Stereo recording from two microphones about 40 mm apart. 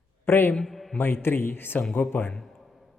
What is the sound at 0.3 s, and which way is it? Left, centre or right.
Speech, left.